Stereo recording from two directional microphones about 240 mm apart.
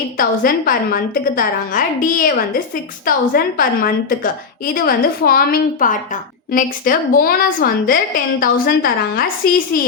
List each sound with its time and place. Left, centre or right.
0.2 s a woman's voice: left